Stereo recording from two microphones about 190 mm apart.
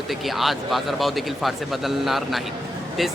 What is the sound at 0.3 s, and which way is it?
Speech, centre (ahead or behind).